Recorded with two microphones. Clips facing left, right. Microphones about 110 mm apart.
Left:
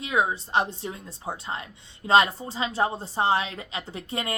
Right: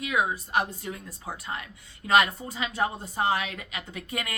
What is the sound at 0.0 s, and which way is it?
A woman's voice, 30° left (ahead or behind).